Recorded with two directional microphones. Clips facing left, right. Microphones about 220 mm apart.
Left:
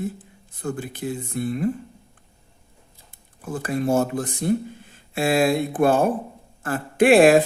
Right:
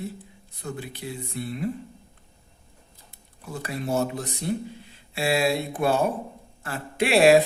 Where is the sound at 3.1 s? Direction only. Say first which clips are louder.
Left 6 dB; 50° left (ahead or behind).